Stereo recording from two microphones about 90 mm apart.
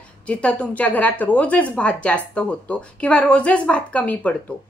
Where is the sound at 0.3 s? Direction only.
15° left (ahead or behind).